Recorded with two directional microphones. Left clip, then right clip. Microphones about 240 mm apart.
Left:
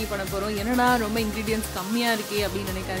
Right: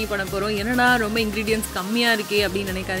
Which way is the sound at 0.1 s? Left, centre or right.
Centre.